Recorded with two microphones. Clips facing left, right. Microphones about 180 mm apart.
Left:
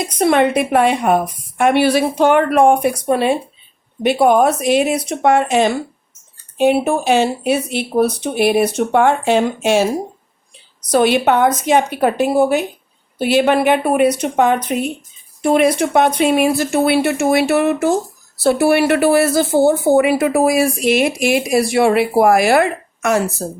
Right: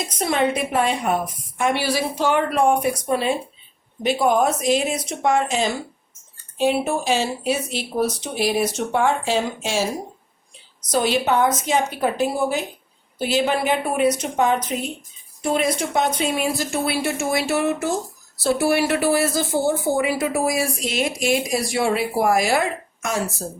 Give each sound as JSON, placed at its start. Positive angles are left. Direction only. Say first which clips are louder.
{"t": 0.2, "sound": "speech", "louder": "left 7 dB", "side_deg": 65}
{"t": 10.9, "sound": "speech", "louder": "left 6 dB", "side_deg": 65}